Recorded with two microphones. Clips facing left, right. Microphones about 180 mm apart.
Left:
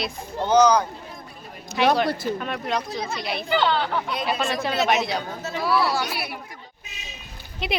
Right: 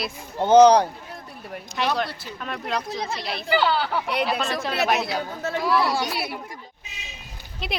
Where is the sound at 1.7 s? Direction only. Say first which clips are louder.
Left 5 dB; 60° left (ahead or behind).